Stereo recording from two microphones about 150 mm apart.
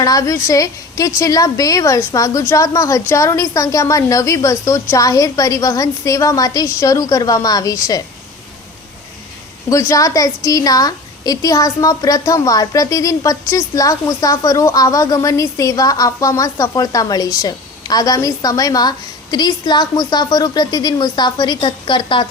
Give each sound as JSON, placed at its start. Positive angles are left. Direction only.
{"t": 0.0, "sound": "a woman's voice", "side_deg": 25}
{"t": 9.6, "sound": "a woman's voice", "side_deg": 20}